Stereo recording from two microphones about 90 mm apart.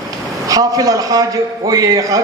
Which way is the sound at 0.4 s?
40° right (ahead or behind).